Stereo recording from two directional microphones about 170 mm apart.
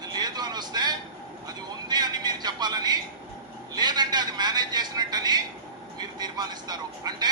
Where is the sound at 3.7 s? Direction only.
25° right (ahead or behind).